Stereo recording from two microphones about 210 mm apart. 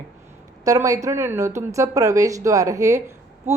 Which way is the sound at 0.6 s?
15° right (ahead or behind).